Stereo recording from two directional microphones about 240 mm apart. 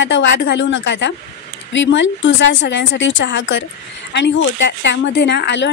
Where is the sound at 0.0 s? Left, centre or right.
Left.